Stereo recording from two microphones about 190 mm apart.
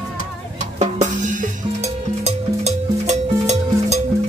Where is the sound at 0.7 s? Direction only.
40° right (ahead or behind).